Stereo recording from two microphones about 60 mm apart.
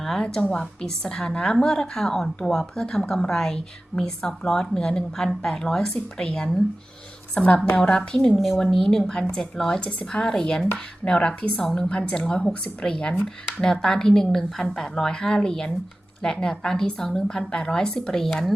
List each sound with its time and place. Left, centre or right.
0.0 s a woman's voice: centre
7.3 s a woman's voice: left
7.8 s a woman's voice: centre
8.4 s a woman's voice: centre